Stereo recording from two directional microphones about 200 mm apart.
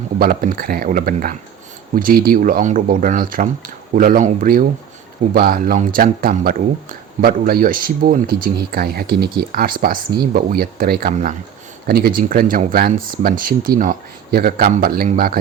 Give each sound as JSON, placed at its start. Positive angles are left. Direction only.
{"t": 0.2, "sound": "speech", "side_deg": -45}